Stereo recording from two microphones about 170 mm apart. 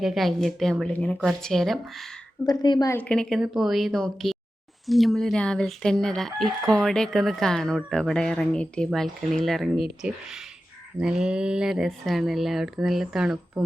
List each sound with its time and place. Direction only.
0.0 s speech: centre (ahead or behind)
2.5 s a woman's voice: 25° left (ahead or behind)
2.9 s speech: 5° left (ahead or behind)